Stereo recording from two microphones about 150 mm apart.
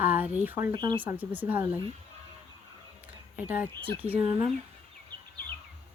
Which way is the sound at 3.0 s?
10° right (ahead or behind).